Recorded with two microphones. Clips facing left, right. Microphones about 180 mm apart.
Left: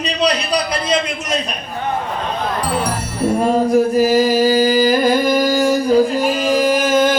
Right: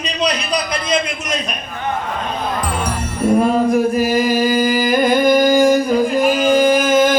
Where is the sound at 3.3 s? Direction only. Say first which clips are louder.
Left 1 dB; 40° left (ahead or behind).